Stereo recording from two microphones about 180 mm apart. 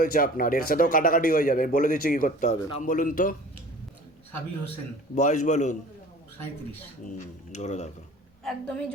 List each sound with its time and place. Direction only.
0.0 s a man's voice: 50° left (ahead or behind)
5.1 s a man's voice: 45° left (ahead or behind)
7.0 s speech: 45° left (ahead or behind)
8.4 s a woman's voice: 5° left (ahead or behind)